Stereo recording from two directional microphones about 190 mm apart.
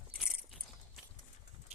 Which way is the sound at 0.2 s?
Centre (ahead or behind).